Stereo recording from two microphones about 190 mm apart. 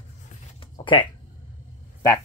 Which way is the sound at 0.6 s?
25° left (ahead or behind).